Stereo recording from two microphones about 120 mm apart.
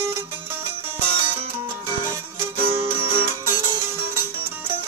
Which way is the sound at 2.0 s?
20° right (ahead or behind).